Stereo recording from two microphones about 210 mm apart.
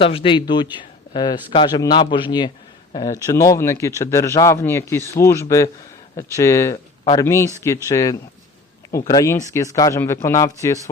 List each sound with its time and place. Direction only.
0.0 s a man's voice: 25° left (ahead or behind)